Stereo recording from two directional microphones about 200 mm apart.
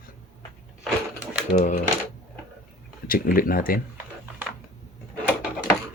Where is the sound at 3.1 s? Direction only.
45° left (ahead or behind).